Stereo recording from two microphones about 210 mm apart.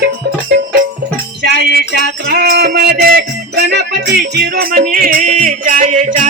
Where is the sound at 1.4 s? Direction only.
55° right (ahead or behind); by 6.2 s 35° right (ahead or behind).